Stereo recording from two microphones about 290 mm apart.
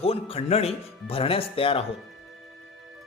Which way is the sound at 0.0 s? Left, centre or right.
Centre.